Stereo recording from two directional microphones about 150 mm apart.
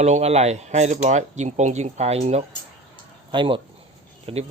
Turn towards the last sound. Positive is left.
turn(degrees=-40)  # may be behind; listen again after turning